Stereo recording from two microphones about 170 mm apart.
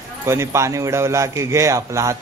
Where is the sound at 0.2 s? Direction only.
15° right (ahead or behind).